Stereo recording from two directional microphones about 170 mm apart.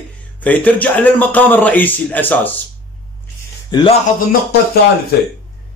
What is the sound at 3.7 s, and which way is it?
Speech, 25° left (ahead or behind).